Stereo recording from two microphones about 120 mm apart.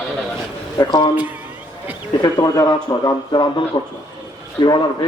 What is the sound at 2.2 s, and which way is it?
A man's voice, 30° left (ahead or behind).